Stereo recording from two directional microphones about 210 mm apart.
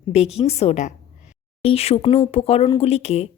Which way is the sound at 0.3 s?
30° left (ahead or behind).